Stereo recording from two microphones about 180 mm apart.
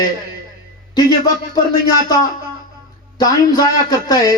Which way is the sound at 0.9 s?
20° left (ahead or behind).